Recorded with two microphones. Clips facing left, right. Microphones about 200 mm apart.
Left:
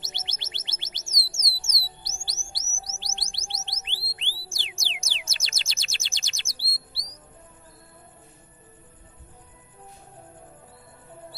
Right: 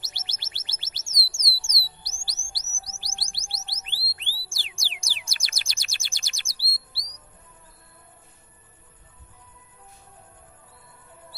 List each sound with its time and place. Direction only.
0.0 s music: 20° left (ahead or behind)